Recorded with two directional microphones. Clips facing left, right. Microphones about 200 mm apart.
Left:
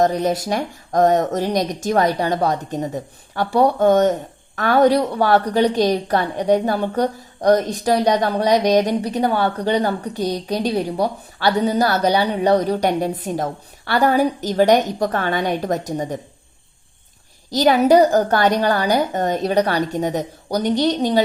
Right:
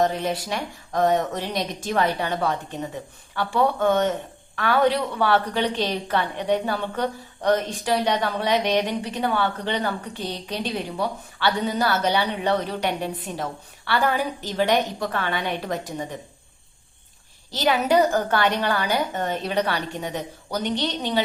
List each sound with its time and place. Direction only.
0.0 s speech: 40° left (ahead or behind)
17.5 s speech: 40° left (ahead or behind)